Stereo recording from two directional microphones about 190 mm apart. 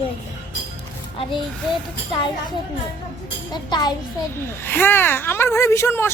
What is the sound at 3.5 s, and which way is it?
Speech, 20° left (ahead or behind).